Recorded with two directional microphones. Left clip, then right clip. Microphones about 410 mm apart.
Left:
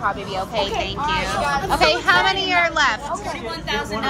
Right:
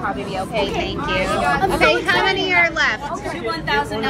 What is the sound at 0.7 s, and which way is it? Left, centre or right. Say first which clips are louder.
Speech: right 1 dB; left.